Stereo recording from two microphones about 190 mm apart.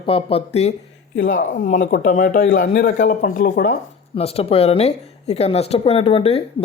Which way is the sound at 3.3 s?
50° left (ahead or behind).